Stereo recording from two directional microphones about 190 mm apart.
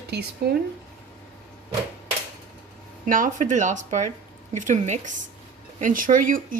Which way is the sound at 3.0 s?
45° right (ahead or behind).